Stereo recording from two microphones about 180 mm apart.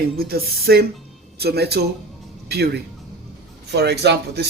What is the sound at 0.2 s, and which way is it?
Speech, 60° right (ahead or behind).